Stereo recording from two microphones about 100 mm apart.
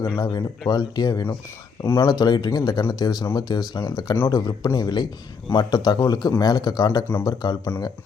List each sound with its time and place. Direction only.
0.2 s speech: 40° left (ahead or behind)
1.8 s speech: 25° left (ahead or behind)
2.0 s a man's voice: 45° left (ahead or behind)